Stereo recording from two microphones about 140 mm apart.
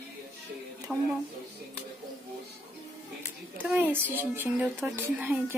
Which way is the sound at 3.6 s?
10° right (ahead or behind).